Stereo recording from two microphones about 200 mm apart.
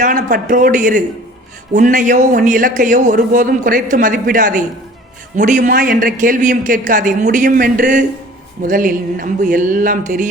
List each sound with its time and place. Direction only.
0.0 s speech: 45° right (ahead or behind)